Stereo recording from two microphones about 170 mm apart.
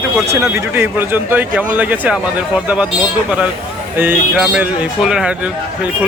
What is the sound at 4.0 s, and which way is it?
Speech, 5° right (ahead or behind).